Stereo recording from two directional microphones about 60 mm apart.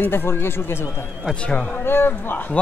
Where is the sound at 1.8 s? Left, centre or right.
Left.